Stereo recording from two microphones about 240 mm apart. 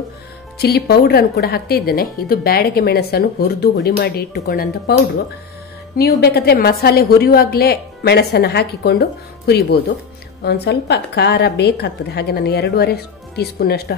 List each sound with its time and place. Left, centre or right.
0.6 s a woman's voice: left
5.9 s a woman's voice: left